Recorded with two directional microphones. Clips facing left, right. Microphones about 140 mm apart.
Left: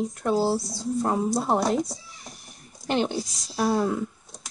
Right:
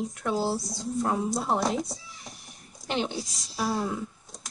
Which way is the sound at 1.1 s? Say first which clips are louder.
Left 4 dB; centre (ahead or behind).